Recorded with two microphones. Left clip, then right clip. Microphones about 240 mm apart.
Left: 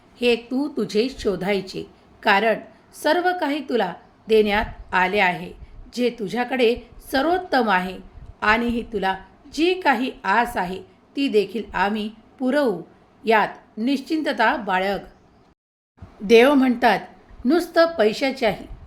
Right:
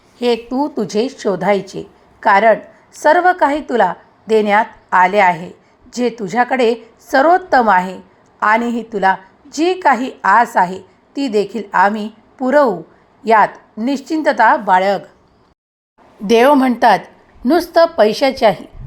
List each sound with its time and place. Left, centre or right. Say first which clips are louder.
0.2 s a woman's voice: right 5 dB; centre
16.2 s speech: right 4 dB; centre